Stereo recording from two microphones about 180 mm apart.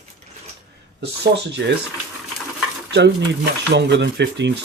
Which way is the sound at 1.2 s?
75° right (ahead or behind).